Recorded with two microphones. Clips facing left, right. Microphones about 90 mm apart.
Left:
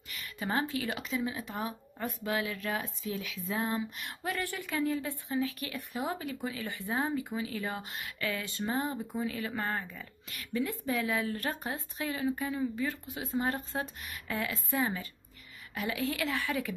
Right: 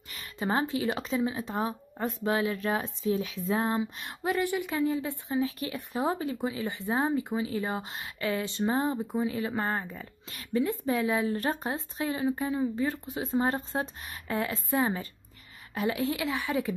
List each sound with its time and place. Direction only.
0.1 s a woman's voice: 30° right (ahead or behind)
4.0 s a woman's voice: 20° right (ahead or behind)